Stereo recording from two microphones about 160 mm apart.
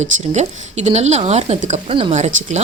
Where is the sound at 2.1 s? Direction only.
45° right (ahead or behind).